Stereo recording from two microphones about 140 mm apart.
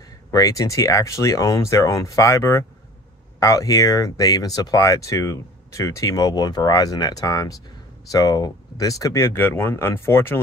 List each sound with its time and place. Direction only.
0.3 s speech: 25° left (ahead or behind)